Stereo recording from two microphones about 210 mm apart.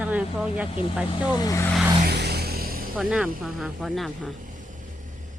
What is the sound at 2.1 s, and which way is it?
Music, 50° right (ahead or behind).